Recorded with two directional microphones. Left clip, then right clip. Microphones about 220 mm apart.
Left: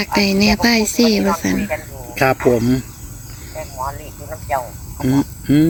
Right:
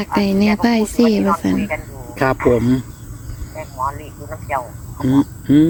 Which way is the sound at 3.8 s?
15° left (ahead or behind).